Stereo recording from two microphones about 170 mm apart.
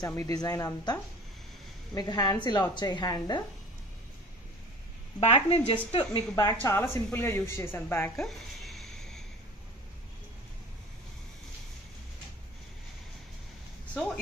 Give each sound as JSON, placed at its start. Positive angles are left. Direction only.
{"t": 0.0, "sound": "speech", "side_deg": 15}
{"t": 5.2, "sound": "a woman's voice", "side_deg": 35}
{"t": 6.3, "sound": "speech", "side_deg": 15}
{"t": 8.5, "sound": "a sound", "side_deg": 0}